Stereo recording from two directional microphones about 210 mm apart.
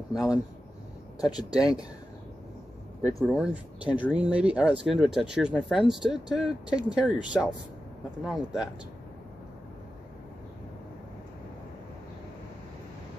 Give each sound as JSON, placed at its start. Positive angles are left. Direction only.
{"t": 0.1, "sound": "speech", "side_deg": -5}
{"t": 1.2, "sound": "speech", "side_deg": 20}
{"t": 1.6, "sound": "speech", "side_deg": -5}
{"t": 3.2, "sound": "speech", "side_deg": 0}